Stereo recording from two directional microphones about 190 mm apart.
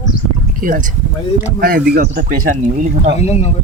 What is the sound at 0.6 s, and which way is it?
Speech, 45° right (ahead or behind).